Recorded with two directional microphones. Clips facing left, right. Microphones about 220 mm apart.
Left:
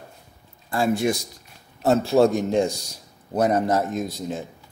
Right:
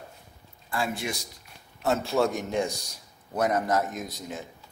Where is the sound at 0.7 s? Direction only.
40° left (ahead or behind).